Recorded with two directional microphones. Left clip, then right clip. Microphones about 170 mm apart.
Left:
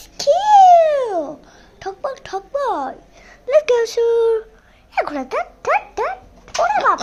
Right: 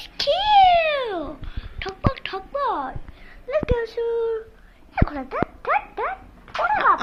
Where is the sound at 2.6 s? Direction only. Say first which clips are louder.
Left 3 dB; 90° left.